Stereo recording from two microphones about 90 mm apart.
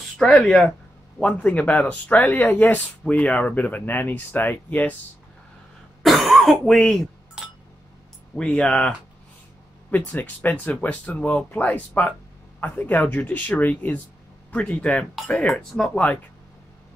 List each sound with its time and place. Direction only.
0.2 s speech: 10° left (ahead or behind)
6.0 s cough: centre (ahead or behind)
8.4 s speech: 10° left (ahead or behind)